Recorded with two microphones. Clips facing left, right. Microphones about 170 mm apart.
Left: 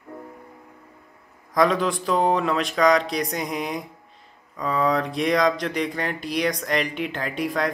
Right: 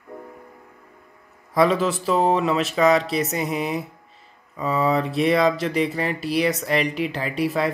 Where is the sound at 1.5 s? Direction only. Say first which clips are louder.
Right 1 dB; 5° right (ahead or behind).